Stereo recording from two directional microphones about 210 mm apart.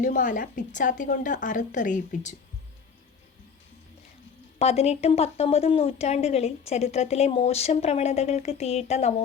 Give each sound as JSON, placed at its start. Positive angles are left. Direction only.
{"t": 0.0, "sound": "a woman's voice", "side_deg": 40}
{"t": 4.6, "sound": "a woman's voice", "side_deg": 30}